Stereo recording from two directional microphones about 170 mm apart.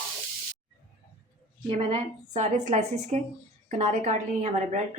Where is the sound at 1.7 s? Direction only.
35° right (ahead or behind).